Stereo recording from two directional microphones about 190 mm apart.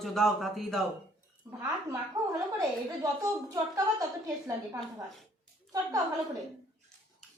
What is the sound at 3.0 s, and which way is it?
A woman's voice, 20° right (ahead or behind).